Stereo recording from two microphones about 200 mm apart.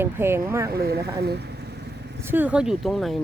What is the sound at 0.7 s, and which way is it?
Speech, 50° right (ahead or behind).